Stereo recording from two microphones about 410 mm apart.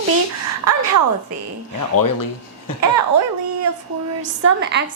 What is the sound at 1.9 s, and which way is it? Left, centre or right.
Speech, left.